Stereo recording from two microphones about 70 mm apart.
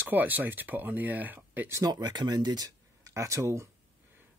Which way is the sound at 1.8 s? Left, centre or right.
Right.